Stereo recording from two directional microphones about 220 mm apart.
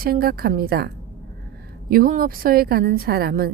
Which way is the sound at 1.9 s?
40° right (ahead or behind).